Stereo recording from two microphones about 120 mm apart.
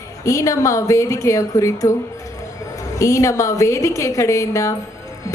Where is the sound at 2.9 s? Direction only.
25° left (ahead or behind).